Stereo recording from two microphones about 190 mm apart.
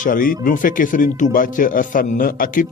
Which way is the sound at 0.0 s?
45° left (ahead or behind).